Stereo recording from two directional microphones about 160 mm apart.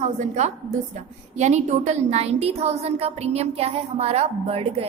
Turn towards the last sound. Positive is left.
turn(degrees=-40)  # may be behind; listen again after turning